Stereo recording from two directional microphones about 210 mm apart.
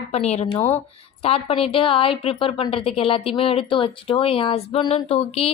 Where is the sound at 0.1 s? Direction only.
30° left (ahead or behind).